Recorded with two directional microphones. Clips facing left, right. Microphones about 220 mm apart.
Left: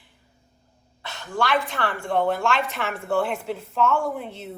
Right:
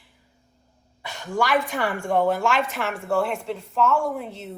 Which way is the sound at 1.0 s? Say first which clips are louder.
Right 1 dB; 10° right (ahead or behind).